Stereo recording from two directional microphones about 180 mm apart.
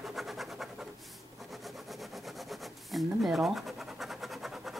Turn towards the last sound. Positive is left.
turn(degrees=0)  # may be behind; listen again after turning